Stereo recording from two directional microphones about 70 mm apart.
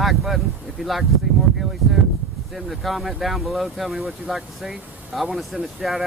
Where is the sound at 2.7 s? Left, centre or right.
Centre.